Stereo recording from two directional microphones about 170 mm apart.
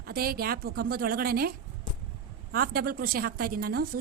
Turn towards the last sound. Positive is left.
turn(degrees=-60)  # may be behind; listen again after turning